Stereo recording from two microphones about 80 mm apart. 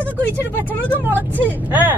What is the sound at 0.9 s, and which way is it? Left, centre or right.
Speech, right.